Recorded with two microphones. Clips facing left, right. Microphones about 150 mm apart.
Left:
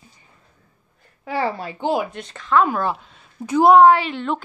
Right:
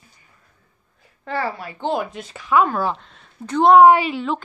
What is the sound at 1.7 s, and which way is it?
Speech, 10° left (ahead or behind).